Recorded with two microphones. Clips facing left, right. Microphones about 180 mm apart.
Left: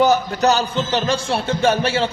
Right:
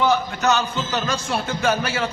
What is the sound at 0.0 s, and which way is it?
A man's voice, 40° left (ahead or behind).